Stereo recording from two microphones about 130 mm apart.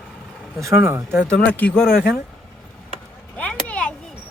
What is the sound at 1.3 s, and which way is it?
Speech, 10° left (ahead or behind).